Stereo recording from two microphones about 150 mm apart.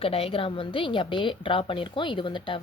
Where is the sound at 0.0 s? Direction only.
40° left (ahead or behind).